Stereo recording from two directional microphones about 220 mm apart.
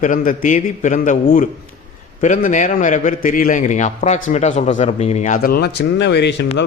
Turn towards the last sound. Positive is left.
turn(degrees=50)  # may be behind; listen again after turning